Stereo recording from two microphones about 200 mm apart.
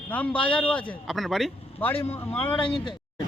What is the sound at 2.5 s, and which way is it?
Speech, 25° left (ahead or behind).